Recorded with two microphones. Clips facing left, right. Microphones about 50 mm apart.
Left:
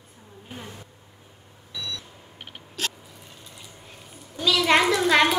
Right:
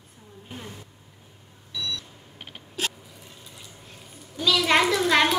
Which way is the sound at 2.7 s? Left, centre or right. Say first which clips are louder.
Right 1 dB; centre.